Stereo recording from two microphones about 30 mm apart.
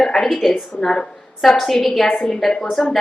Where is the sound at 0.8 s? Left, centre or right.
Left.